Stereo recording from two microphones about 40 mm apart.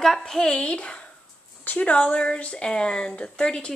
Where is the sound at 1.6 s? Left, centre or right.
Left.